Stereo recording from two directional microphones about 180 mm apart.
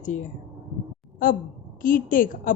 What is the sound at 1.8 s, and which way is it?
Speech, 50° left (ahead or behind).